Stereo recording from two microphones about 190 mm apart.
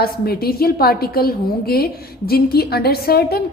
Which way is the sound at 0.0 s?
55° left (ahead or behind).